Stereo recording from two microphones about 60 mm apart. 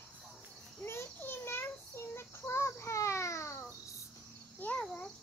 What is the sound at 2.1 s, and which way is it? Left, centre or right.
A child's voice, left.